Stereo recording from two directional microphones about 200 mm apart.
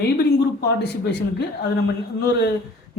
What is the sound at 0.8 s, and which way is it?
Speech, 55° left (ahead or behind).